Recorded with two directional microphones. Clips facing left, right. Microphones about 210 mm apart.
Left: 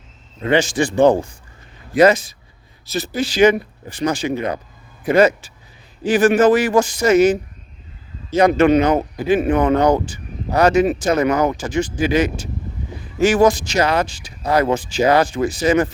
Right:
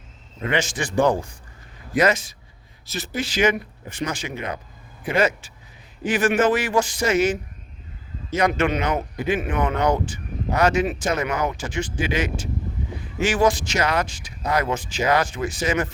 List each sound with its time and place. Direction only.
0.5 s speech: 30° left (ahead or behind)